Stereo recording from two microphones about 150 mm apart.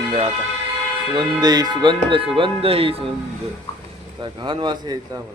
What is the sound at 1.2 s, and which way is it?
Speech, 25° right (ahead or behind).